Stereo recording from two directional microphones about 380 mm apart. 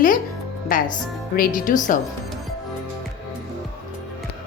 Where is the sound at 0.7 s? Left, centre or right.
Left.